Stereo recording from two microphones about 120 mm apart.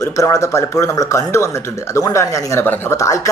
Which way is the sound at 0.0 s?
25° left (ahead or behind).